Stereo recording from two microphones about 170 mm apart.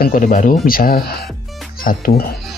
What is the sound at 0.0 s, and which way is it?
Speech, 50° left (ahead or behind).